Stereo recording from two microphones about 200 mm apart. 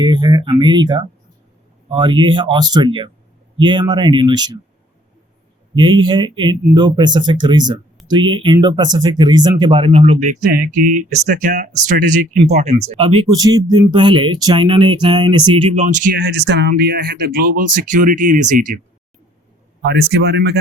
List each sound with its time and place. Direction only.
0.0 s speech: 20° right (ahead or behind)
6.0 s speech: 25° right (ahead or behind)
10.0 s speech: 35° right (ahead or behind)
19.8 s speech: 50° right (ahead or behind)